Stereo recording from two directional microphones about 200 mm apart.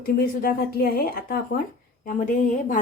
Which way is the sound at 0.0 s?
45° left (ahead or behind).